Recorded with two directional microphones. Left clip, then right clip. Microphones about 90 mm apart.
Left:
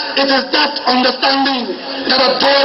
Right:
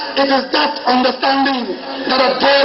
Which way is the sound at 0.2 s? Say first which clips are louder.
Left 1 dB; 20° left (ahead or behind).